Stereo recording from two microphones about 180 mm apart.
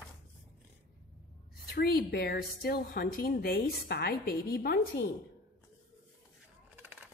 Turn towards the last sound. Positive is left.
turn(degrees=-10)  # may be behind; listen again after turning